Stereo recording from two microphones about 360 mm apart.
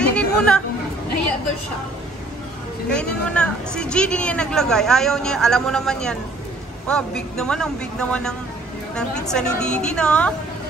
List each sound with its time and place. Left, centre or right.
0.0 s chatter: centre
2.9 s speech: centre